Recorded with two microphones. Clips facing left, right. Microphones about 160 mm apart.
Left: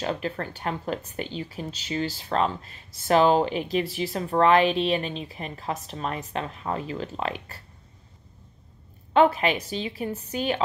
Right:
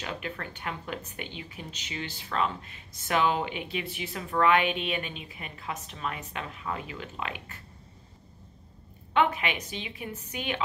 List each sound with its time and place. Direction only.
0.0 s speech: 35° left (ahead or behind)
9.1 s speech: 35° left (ahead or behind)